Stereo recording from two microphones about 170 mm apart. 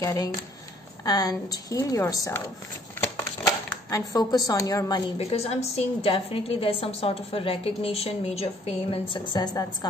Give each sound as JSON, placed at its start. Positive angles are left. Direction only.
{"t": 0.0, "sound": "a woman's voice", "side_deg": 20}
{"t": 3.9, "sound": "a woman's voice", "side_deg": 20}
{"t": 5.1, "sound": "a woman's voice", "side_deg": 35}